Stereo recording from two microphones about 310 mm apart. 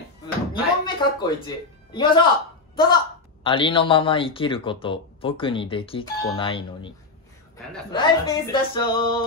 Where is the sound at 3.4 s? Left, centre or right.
Centre.